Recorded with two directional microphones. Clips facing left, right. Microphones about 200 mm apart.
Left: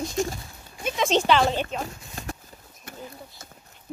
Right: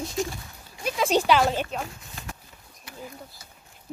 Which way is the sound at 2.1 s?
35° left (ahead or behind).